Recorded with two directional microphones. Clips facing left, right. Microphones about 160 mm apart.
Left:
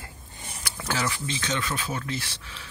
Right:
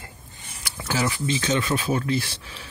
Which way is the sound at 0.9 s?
10° right (ahead or behind).